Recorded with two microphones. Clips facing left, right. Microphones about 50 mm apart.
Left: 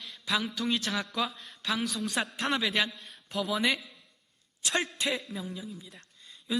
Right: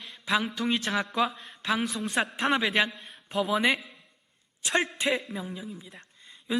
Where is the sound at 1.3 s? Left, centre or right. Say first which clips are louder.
Right 4 dB; right.